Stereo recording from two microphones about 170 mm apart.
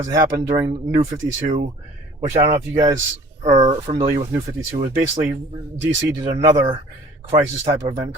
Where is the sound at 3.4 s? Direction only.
45° right (ahead or behind).